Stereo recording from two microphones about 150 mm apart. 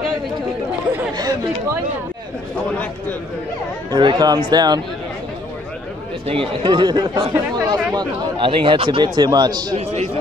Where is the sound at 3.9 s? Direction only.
30° right (ahead or behind).